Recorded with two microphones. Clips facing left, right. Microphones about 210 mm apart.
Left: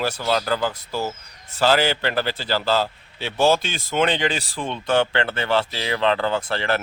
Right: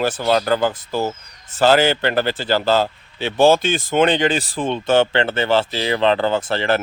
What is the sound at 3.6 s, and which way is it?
Speech, 50° right (ahead or behind).